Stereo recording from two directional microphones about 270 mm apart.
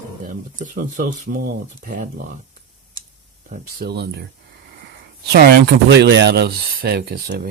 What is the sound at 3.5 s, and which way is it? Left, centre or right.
Speech, right.